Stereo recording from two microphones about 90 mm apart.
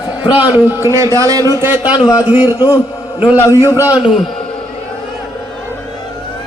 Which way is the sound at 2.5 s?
45° left (ahead or behind).